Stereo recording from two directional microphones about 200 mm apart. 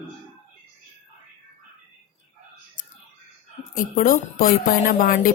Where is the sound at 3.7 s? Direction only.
45° left (ahead or behind).